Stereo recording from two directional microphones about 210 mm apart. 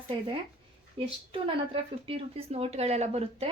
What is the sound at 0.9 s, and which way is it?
Speech, 25° right (ahead or behind).